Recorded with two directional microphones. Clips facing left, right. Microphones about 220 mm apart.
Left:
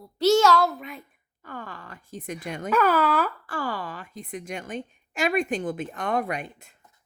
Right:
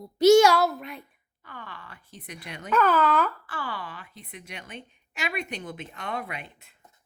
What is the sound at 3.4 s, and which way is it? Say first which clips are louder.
A woman's voice: left 5 dB; 45° left (ahead or behind).